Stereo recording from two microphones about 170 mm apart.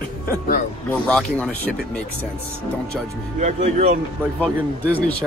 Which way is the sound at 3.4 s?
45° right (ahead or behind).